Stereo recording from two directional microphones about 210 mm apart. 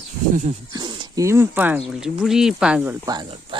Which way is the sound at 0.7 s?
20° right (ahead or behind).